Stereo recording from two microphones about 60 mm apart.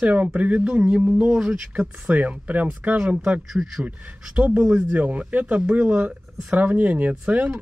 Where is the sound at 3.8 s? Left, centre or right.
Right.